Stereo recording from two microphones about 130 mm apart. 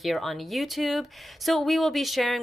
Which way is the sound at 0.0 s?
Centre (ahead or behind).